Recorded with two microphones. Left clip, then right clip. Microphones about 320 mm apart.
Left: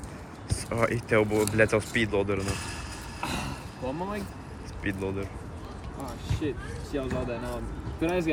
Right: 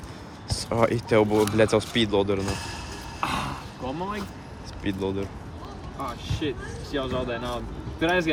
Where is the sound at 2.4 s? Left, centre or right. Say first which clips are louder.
Right 3 dB; right.